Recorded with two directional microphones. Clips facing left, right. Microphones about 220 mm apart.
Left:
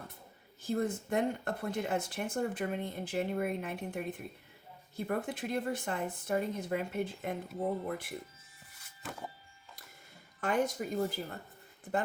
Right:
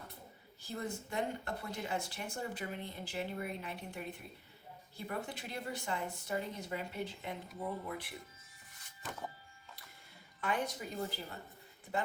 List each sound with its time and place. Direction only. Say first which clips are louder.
0.6 s speech: left 8 dB; 50° left (ahead or behind)
10.4 s speech: left 6 dB; 45° left (ahead or behind)